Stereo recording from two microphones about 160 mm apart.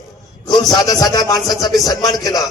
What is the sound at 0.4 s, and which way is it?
A man's voice, 25° left (ahead or behind).